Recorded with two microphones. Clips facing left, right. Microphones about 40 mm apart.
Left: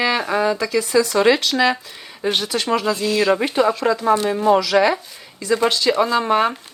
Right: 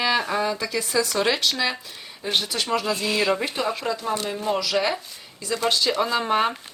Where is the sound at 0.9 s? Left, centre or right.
Left.